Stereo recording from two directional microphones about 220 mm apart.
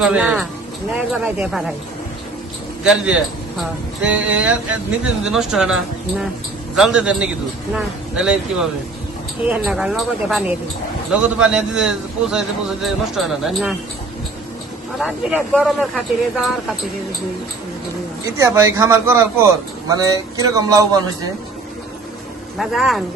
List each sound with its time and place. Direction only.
0.0 s a man's voice: 5° right (ahead or behind)
2.8 s a man's voice: 5° right (ahead or behind)
14.9 s a man's voice: 5° right (ahead or behind)
18.3 s a man's voice: 10° right (ahead or behind)
22.5 s a man's voice: centre (ahead or behind)